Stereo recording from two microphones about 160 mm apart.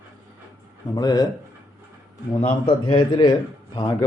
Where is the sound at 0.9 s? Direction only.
25° left (ahead or behind).